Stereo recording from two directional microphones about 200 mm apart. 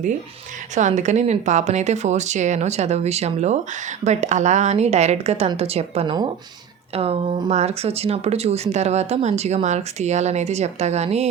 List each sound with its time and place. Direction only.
0.7 s speech: 35° right (ahead or behind)